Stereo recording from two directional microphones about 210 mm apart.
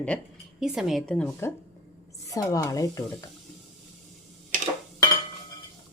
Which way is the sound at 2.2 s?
15° left (ahead or behind).